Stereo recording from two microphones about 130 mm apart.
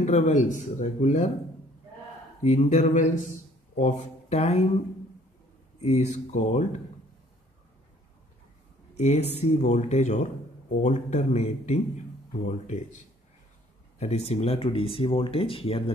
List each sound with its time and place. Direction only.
0.0 s speech: 65° left (ahead or behind)
2.4 s speech: 65° left (ahead or behind)
5.8 s speech: 55° left (ahead or behind)
8.9 s speech: 55° left (ahead or behind)
13.9 s speech: 55° left (ahead or behind)